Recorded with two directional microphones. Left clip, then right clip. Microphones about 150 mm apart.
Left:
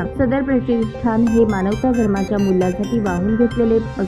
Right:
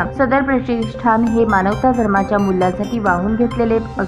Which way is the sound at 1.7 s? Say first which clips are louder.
Right 4 dB; centre (ahead or behind).